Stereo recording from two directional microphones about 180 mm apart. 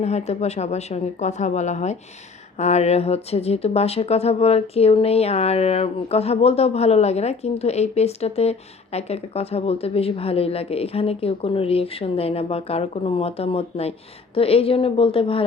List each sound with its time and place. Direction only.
0.0 s speech: 35° left (ahead or behind)